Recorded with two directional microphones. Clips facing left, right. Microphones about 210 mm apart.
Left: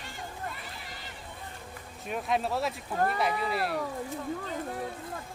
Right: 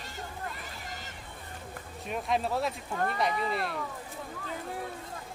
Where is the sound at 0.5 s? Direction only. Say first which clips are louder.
Right 1 dB; 45° right (ahead or behind).